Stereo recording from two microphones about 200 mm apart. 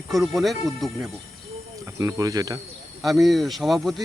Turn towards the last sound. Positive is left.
turn(degrees=0)  # may be behind; listen again after turning